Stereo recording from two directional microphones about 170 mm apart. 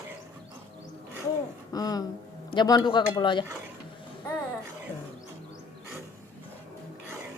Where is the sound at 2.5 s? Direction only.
25° left (ahead or behind).